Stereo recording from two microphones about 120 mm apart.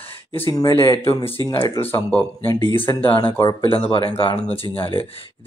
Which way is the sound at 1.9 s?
15° left (ahead or behind).